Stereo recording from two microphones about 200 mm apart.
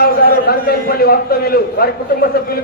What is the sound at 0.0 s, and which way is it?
A man's voice, 50° left (ahead or behind).